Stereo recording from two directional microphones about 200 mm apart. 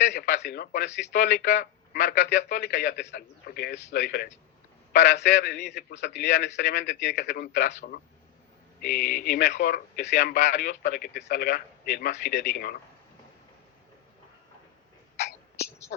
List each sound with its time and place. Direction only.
0.1 s a man's voice: 55° left (ahead or behind)
1.1 s a man's voice: 45° left (ahead or behind)
8.8 s a man's voice: 45° left (ahead or behind)
15.9 s a man's voice: 45° left (ahead or behind)